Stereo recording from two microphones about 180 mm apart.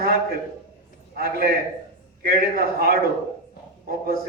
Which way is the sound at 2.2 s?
55° right (ahead or behind).